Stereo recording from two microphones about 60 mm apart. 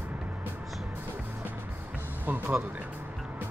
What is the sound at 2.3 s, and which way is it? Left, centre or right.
Speech, right.